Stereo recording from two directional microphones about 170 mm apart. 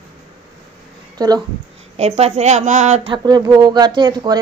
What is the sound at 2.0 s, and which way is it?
A woman's voice, 40° right (ahead or behind).